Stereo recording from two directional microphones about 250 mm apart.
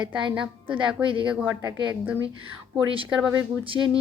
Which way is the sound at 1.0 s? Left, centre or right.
Right.